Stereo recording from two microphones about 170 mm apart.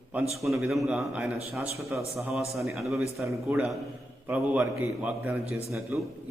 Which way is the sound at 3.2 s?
20° right (ahead or behind).